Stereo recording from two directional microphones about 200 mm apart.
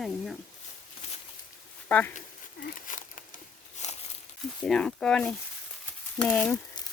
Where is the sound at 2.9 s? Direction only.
40° left (ahead or behind).